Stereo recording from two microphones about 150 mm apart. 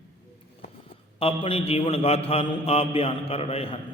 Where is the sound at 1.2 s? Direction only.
40° left (ahead or behind).